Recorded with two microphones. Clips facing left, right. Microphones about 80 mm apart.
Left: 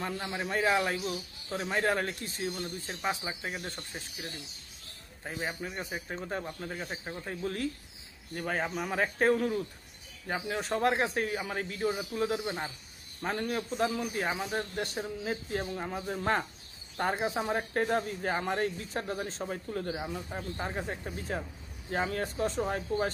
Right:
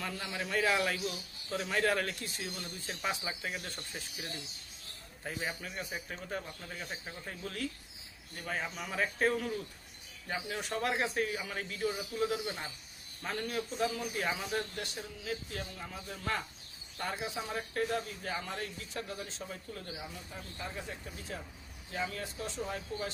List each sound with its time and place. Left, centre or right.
0.0 s a man's voice: left